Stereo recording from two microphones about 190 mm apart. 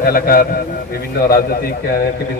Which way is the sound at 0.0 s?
50° left (ahead or behind).